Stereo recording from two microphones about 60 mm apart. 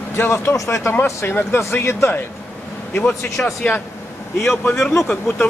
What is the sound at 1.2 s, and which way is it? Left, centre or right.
Speech, left.